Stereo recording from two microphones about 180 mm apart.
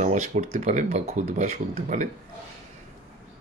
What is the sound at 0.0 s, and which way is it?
Speech, 45° right (ahead or behind).